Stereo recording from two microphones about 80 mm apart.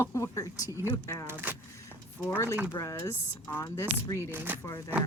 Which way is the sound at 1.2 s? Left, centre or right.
Right.